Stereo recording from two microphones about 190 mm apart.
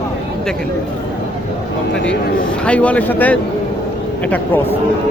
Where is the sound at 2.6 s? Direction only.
5° left (ahead or behind).